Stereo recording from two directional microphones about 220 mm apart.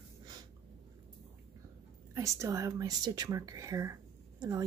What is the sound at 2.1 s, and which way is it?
A woman's voice, 15° right (ahead or behind).